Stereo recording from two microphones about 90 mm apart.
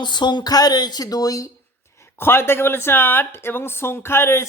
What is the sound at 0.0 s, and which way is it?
Speech, 55° left (ahead or behind).